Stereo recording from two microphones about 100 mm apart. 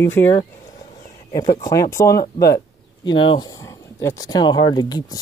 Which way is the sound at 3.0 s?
55° left (ahead or behind).